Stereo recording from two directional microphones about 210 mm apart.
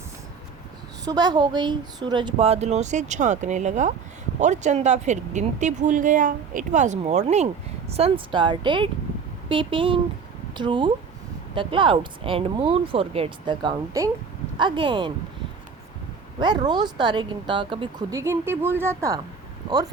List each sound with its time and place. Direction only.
1.0 s speech: 20° right (ahead or behind)
16.4 s speech: 20° right (ahead or behind)